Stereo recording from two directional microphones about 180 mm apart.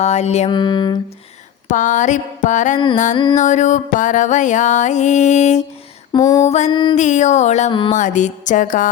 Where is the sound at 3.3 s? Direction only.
40° left (ahead or behind).